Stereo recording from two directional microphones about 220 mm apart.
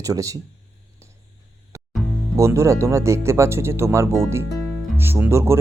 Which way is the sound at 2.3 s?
10° right (ahead or behind).